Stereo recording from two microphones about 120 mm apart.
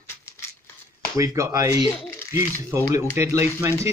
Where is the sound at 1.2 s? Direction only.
25° right (ahead or behind).